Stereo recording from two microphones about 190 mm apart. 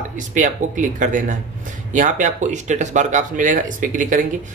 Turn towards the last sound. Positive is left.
turn(degrees=-45)  # may be behind; listen again after turning